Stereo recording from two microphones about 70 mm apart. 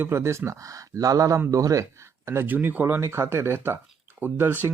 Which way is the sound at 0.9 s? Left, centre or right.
Right.